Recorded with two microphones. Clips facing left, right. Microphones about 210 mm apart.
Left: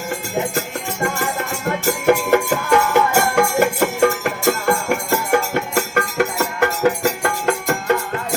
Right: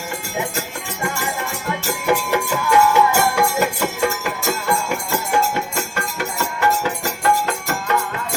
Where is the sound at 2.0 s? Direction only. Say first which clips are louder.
Left 4 dB; 50° left (ahead or behind).